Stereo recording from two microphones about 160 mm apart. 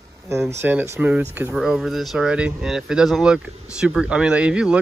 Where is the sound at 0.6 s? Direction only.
15° right (ahead or behind).